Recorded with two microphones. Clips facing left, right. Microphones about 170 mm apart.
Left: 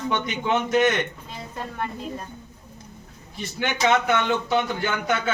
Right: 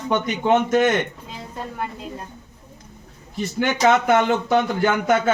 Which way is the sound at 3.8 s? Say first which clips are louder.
Right 4 dB; 45° right (ahead or behind).